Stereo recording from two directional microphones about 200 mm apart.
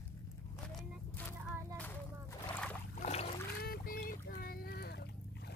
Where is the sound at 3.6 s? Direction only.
50° left (ahead or behind).